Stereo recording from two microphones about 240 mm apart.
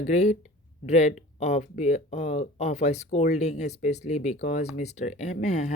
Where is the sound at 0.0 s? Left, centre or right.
Left.